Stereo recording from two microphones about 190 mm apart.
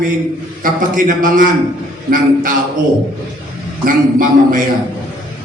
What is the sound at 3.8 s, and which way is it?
Speech, 45° right (ahead or behind).